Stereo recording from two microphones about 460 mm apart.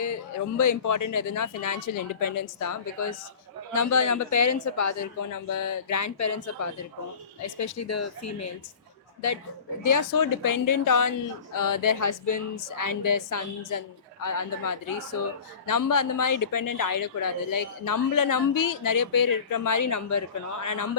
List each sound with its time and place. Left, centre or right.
0.5 s speech: left
9.8 s speech: left